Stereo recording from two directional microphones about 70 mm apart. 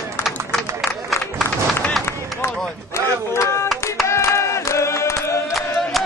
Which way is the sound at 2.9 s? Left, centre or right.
Left.